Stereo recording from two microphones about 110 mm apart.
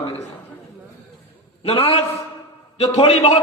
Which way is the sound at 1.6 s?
60° left (ahead or behind).